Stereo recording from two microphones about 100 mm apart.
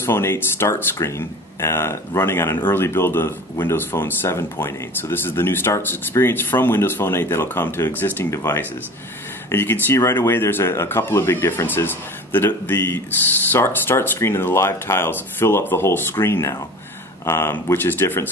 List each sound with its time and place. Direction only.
0.0 s speech: 25° left (ahead or behind)